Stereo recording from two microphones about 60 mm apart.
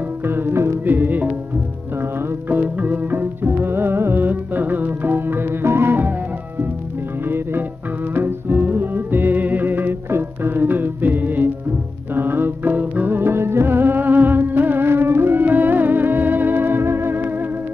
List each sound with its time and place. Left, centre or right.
0.3 s music: right
0.8 s music: right
2.5 s music: right
7.2 s music: right